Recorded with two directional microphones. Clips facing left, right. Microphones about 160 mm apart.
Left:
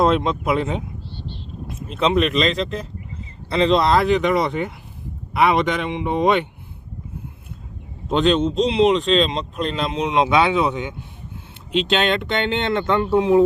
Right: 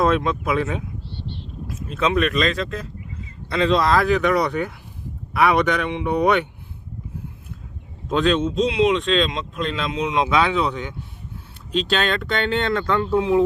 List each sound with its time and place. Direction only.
0.0 s speech: 20° left (ahead or behind)
8.1 s speech: 25° left (ahead or behind)